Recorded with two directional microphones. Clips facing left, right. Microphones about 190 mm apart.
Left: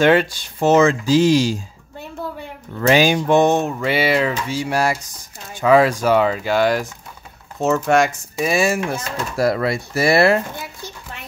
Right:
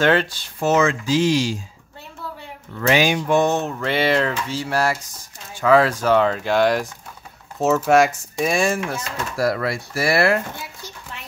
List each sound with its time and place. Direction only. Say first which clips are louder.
0.0 s speech: left 4 dB; 15° left (ahead or behind)
0.6 s speech: left 4 dB; 30° left (ahead or behind)
2.9 s speech: left 3 dB; 35° left (ahead or behind)
3.3 s speech: left 4 dB; 15° left (ahead or behind)
9.4 s speech: left 3 dB; 25° left (ahead or behind)